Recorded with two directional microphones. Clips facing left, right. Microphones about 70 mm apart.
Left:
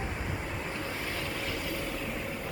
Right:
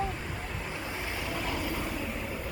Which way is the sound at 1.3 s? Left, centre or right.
Centre.